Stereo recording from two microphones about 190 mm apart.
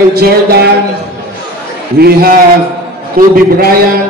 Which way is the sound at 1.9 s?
55° right (ahead or behind).